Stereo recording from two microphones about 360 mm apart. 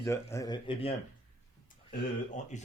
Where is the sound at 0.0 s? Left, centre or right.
Centre.